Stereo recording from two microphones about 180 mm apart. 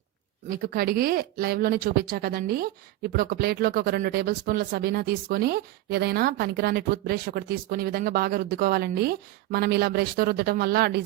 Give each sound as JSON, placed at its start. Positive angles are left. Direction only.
{"t": 0.6, "sound": "speech", "side_deg": -55}